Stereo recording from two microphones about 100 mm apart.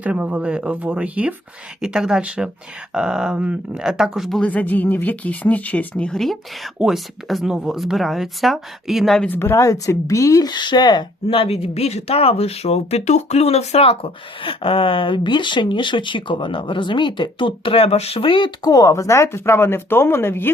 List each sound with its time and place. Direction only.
0.0 s speech: 15° right (ahead or behind)
4.4 s speech: 15° left (ahead or behind)
9.2 s speech: 20° left (ahead or behind)
10.5 s speech: 50° left (ahead or behind)
11.3 s speech: 85° left; by 18.7 s 55° left (ahead or behind)
18.7 s speech: 35° left (ahead or behind)